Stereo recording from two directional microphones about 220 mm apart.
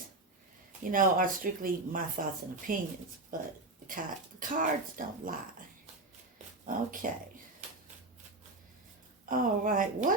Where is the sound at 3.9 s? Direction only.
35° right (ahead or behind).